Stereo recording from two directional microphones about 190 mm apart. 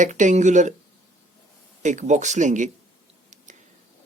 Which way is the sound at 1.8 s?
40° right (ahead or behind).